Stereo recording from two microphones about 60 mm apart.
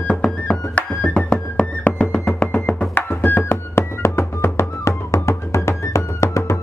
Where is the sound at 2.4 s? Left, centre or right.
Left.